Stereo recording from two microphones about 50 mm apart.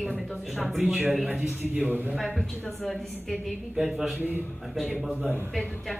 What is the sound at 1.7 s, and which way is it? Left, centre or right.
Speech, right.